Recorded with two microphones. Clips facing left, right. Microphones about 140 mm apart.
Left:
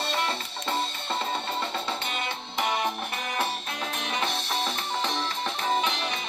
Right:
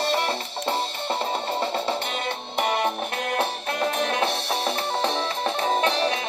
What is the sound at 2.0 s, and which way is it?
Music, 55° right (ahead or behind).